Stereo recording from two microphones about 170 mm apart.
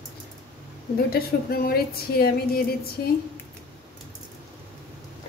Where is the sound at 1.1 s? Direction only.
65° left (ahead or behind).